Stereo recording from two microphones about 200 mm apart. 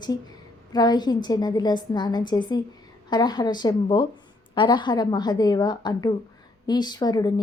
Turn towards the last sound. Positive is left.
turn(degrees=20)  # may be behind; listen again after turning